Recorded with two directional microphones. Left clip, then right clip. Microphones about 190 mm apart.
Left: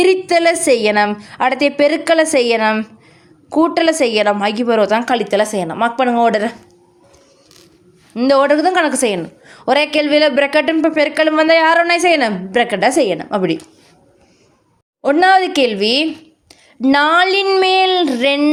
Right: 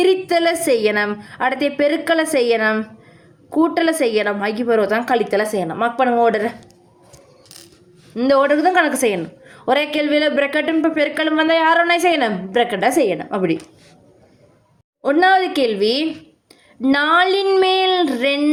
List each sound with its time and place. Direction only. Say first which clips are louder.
0.0 s a woman's voice: left 3 dB; 30° left (ahead or behind)
8.1 s a woman's voice: left 3 dB; 35° left (ahead or behind)
15.0 s a woman's voice: left 3 dB; 35° left (ahead or behind)